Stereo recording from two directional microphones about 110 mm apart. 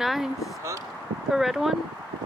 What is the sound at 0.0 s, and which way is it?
Speech, centre (ahead or behind).